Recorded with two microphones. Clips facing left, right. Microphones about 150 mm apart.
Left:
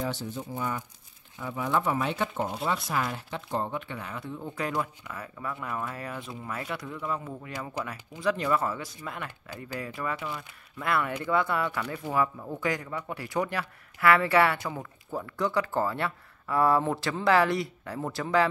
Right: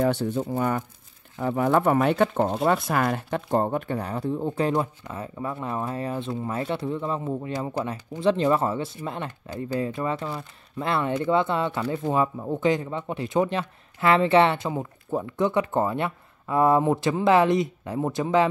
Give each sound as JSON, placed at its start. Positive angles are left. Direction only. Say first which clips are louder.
{"t": 0.0, "sound": "speech", "louder": "right 10 dB", "side_deg": -60}